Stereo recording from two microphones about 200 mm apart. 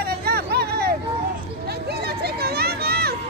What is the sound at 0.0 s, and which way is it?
Vehicle, 50° right (ahead or behind).